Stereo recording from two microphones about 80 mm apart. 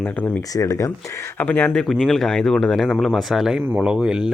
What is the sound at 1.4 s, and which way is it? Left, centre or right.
Speech, left.